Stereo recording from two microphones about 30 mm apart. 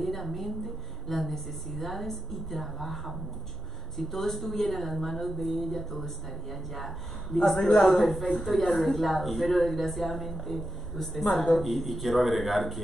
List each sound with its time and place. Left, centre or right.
0.0 s a woman's voice: centre